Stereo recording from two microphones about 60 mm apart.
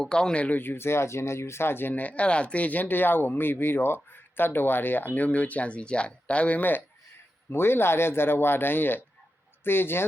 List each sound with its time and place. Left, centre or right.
0.0 s speech: centre
0.6 s speech: left
7.5 s speech: left